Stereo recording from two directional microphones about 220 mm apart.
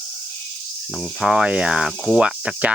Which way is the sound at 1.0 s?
Centre (ahead or behind).